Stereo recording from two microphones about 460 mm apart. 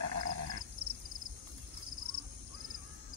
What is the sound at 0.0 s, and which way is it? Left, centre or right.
Grunt, right.